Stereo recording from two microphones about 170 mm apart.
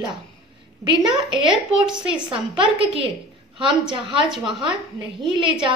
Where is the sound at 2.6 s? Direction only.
30° right (ahead or behind).